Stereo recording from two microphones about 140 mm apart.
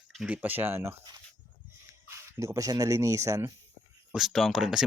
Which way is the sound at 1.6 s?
20° right (ahead or behind).